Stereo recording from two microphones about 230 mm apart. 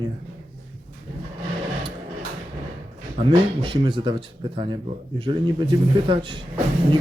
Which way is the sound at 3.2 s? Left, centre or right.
Right.